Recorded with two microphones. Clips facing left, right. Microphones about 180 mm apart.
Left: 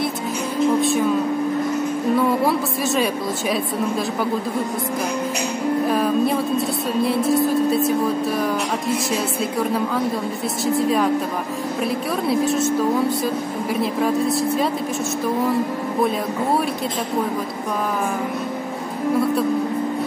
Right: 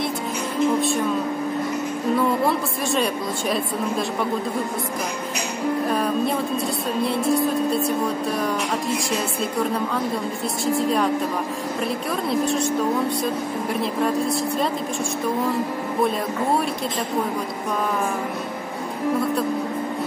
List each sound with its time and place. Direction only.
0.7 s music: centre (ahead or behind)
2.1 s speech: centre (ahead or behind)
5.9 s speech: centre (ahead or behind)
10.6 s speech: centre (ahead or behind)
12.3 s speech: 5° left (ahead or behind)
13.7 s speech: centre (ahead or behind)